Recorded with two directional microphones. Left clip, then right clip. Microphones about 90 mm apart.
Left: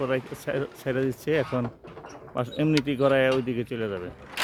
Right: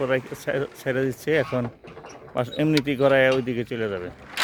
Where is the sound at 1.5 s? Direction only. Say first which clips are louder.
Right 2 dB; centre (ahead or behind).